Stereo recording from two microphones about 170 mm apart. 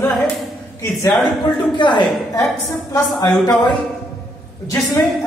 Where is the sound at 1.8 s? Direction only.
25° left (ahead or behind).